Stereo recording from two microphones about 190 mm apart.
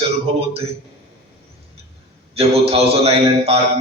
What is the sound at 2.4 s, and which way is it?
A man's voice, 30° right (ahead or behind).